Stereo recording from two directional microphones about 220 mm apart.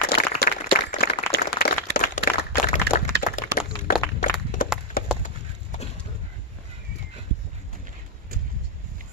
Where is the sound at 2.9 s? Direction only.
45° right (ahead or behind).